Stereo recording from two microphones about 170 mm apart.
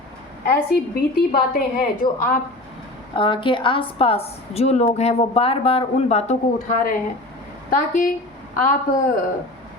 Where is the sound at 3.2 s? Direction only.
30° left (ahead or behind).